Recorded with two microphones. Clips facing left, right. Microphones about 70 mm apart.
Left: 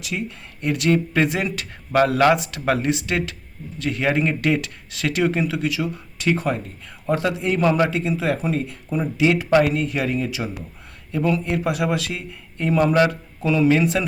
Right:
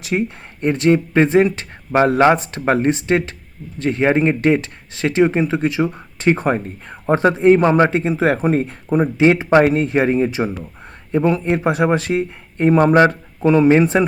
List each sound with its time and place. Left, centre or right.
0.0 s a man's voice: right